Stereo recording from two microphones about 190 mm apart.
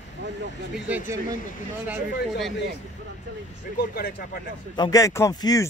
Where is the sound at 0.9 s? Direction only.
15° right (ahead or behind).